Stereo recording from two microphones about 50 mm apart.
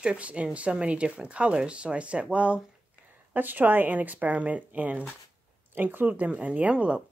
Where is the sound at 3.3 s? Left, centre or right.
Right.